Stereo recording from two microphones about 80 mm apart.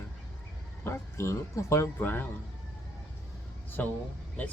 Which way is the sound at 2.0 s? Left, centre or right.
Left.